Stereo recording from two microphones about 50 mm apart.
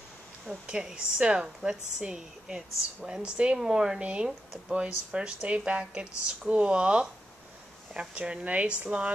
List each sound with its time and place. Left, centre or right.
0.7 s a woman's voice: centre
3.5 s a woman's voice: centre